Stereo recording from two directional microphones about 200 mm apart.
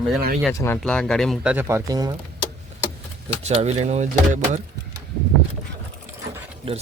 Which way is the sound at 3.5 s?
30° right (ahead or behind).